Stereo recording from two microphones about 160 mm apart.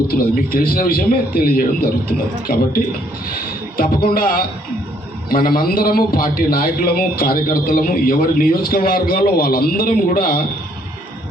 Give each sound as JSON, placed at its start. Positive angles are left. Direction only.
{"t": 0.1, "sound": "a man's voice", "side_deg": 65}
{"t": 3.8, "sound": "a man's voice", "side_deg": 60}